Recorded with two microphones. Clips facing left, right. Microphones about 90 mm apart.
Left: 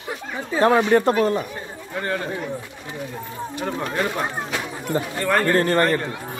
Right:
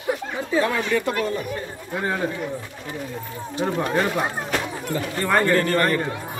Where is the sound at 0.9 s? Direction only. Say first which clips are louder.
Left 6 dB; 40° left (ahead or behind).